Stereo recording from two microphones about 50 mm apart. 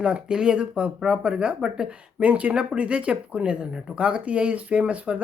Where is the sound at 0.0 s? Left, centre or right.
Centre.